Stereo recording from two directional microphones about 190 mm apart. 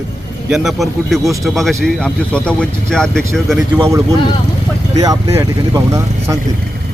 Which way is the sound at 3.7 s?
15° right (ahead or behind).